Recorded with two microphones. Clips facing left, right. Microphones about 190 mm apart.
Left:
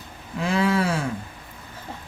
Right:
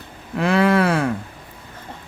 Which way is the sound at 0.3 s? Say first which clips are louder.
Right 5 dB; 65° right (ahead or behind).